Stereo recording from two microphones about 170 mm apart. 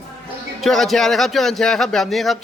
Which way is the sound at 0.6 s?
Centre (ahead or behind).